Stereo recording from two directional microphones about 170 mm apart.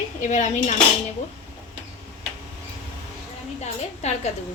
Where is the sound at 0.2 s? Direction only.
45° left (ahead or behind).